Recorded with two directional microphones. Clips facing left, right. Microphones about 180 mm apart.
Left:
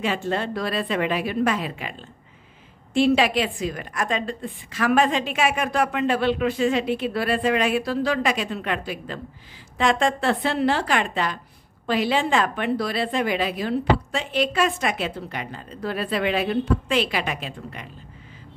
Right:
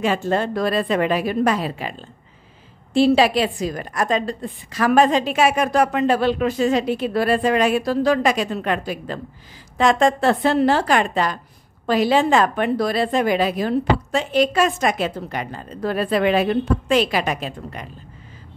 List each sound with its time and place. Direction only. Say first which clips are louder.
0.0 s a woman's voice: right 5 dB; 45° right (ahead or behind)